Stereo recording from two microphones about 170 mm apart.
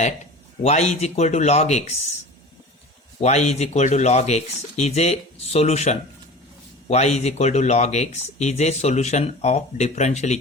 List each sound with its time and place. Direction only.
0.6 s speech: 40° left (ahead or behind)
3.2 s speech: 40° left (ahead or behind)